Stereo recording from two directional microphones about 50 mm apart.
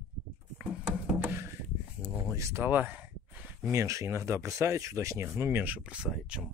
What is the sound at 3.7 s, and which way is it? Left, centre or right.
Speech, right.